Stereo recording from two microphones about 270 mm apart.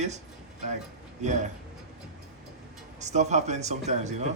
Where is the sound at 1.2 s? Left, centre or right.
Right.